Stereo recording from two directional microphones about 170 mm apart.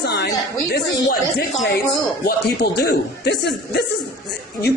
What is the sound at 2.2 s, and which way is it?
A man's voice, 70° left (ahead or behind).